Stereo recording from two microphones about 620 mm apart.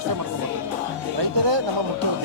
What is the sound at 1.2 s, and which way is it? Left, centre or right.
Speech, right.